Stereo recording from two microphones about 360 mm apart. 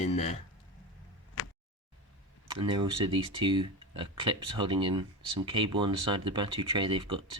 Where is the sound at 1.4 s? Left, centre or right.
Left.